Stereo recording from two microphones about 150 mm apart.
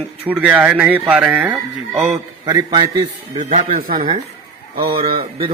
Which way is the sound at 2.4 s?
25° right (ahead or behind).